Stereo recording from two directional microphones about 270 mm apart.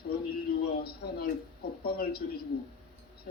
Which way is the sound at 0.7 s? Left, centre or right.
Left.